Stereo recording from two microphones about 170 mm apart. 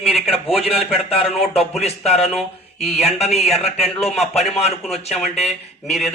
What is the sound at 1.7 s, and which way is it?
Speech, 40° left (ahead or behind).